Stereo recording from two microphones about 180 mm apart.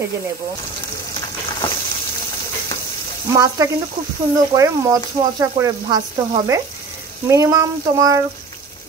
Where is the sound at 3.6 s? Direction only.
20° right (ahead or behind).